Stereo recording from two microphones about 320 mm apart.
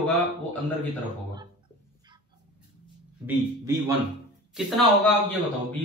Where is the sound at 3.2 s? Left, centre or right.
Centre.